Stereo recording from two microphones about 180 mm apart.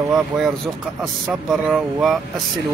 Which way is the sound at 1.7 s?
Centre (ahead or behind).